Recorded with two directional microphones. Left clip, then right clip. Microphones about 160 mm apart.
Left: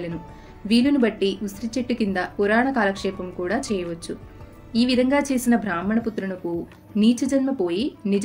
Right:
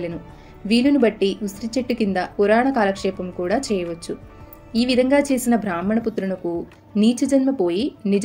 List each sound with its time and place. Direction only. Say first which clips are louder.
0.7 s speech: right 3 dB; 35° right (ahead or behind)